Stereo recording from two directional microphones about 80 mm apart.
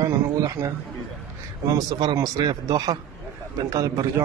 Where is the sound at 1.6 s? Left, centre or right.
Right.